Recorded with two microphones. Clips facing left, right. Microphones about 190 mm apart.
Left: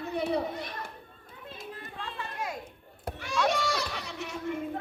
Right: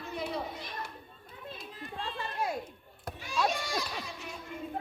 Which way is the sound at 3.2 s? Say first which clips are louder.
Left 4 dB; 80° left.